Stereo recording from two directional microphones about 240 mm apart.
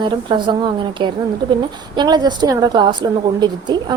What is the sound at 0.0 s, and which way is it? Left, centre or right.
A woman's voice, centre.